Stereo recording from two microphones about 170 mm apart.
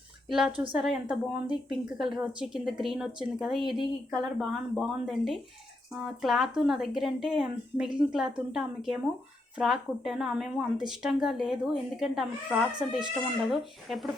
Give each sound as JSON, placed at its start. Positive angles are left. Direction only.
{"t": 0.3, "sound": "a woman's voice", "side_deg": -5}